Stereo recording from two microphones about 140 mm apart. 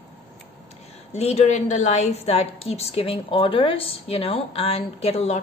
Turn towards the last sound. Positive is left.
turn(degrees=50)  # may be behind; listen again after turning